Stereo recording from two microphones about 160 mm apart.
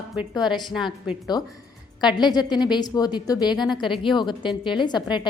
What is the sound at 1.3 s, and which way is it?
Speech, 25° left (ahead or behind).